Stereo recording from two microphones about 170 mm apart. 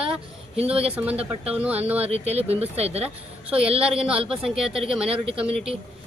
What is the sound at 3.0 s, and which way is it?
Speech, 5° right (ahead or behind).